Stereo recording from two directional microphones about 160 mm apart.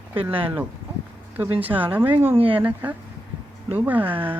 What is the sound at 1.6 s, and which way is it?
Speech, 10° right (ahead or behind).